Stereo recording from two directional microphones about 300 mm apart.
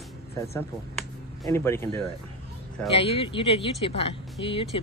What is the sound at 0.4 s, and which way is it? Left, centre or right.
Speech, centre.